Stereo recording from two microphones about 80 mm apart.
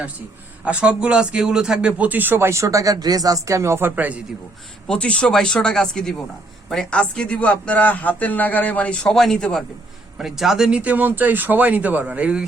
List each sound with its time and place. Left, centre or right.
0.6 s speech: centre
4.9 s a man's voice: centre
10.2 s speech: centre